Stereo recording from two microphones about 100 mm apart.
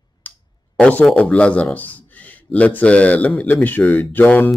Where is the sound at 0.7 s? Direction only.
10° left (ahead or behind).